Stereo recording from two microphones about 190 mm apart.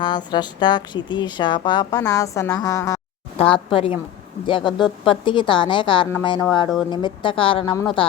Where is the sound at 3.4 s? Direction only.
30° left (ahead or behind).